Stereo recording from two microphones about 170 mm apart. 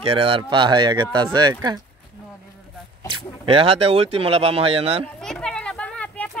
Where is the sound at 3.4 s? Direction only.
35° right (ahead or behind).